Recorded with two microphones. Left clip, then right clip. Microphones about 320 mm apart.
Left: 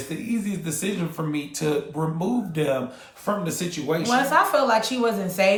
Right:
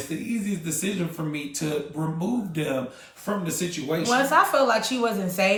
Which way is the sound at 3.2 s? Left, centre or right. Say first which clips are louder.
Left 2 dB; centre.